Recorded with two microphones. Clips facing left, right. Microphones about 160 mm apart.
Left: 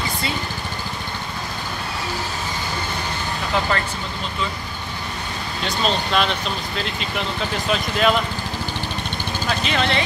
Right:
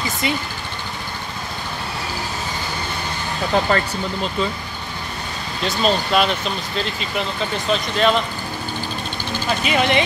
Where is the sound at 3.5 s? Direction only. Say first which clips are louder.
Right 4 dB; 40° right (ahead or behind).